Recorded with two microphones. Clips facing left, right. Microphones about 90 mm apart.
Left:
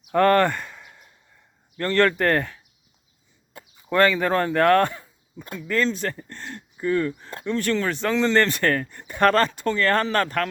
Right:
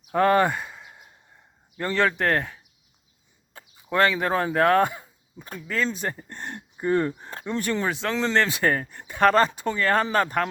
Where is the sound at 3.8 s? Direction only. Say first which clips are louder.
Left 2 dB; centre (ahead or behind); by 7.2 s 30° right (ahead or behind).